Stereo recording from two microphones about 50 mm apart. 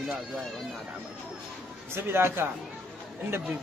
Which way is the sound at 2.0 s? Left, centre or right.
Right.